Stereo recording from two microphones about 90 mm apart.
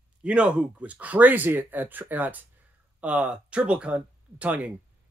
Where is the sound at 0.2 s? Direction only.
10° right (ahead or behind).